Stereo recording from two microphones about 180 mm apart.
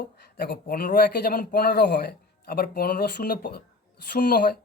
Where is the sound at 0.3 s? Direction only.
60° left (ahead or behind).